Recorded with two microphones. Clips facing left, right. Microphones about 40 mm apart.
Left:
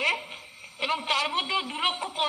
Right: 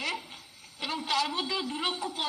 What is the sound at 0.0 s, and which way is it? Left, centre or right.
A man's voice, left.